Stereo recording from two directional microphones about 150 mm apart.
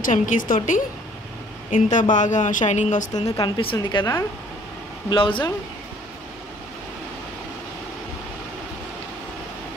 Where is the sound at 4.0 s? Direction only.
20° left (ahead or behind).